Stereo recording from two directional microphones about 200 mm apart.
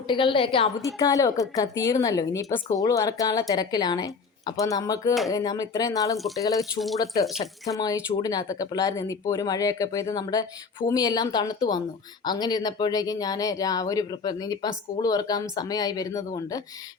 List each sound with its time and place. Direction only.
0.1 s speech: 25° left (ahead or behind)
0.9 s speech: 15° left (ahead or behind)
6.1 s speech: centre (ahead or behind)
7.0 s speech: 15° left (ahead or behind)